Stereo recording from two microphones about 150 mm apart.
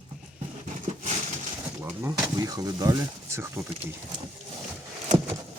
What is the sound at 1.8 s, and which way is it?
Speech, 20° right (ahead or behind).